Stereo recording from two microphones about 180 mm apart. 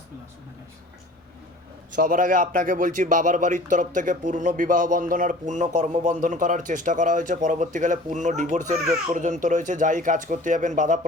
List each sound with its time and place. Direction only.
2.0 s speech: 50° right (ahead or behind)